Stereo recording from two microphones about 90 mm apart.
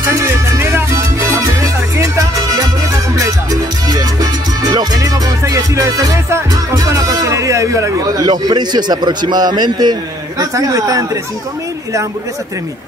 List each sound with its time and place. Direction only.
0.1 s music: 30° right (ahead or behind)
3.9 s music: 45° right (ahead or behind)
8.3 s a man's voice: 50° right (ahead or behind)
10.4 s speech: 40° right (ahead or behind)